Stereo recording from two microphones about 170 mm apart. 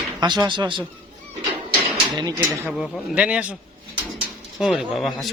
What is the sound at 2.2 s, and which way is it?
Speech, 20° right (ahead or behind).